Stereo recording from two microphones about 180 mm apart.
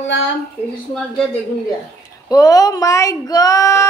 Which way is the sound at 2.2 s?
20° left (ahead or behind).